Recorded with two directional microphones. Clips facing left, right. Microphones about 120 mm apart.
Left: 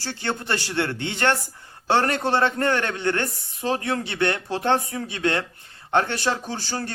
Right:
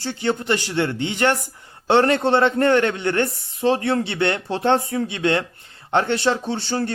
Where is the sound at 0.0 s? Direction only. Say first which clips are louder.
Right 6 dB; 20° right (ahead or behind).